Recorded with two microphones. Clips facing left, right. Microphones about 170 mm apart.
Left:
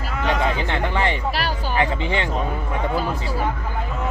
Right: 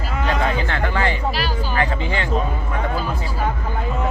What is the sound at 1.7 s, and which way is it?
Speech, 20° left (ahead or behind).